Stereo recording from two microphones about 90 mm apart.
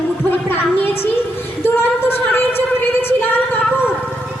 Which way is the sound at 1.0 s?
25° left (ahead or behind).